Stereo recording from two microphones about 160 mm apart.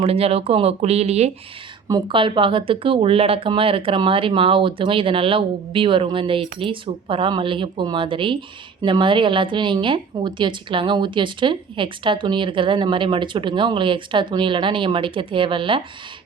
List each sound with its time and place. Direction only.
0.0 s a woman's voice: 40° right (ahead or behind)
1.9 s a woman's voice: 30° right (ahead or behind)